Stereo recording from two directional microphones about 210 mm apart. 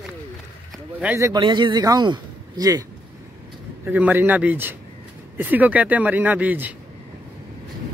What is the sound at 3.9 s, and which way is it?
Speech, 10° right (ahead or behind).